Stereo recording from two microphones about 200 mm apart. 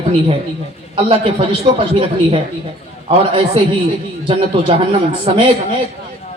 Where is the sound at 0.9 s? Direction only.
30° right (ahead or behind).